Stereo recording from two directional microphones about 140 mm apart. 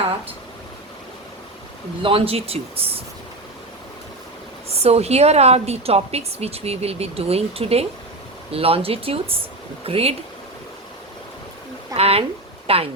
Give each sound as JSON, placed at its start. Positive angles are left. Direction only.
{"t": 2.0, "sound": "a woman's voice", "side_deg": -40}
{"t": 4.7, "sound": "a woman's voice", "side_deg": -45}
{"t": 11.9, "sound": "speech", "side_deg": -45}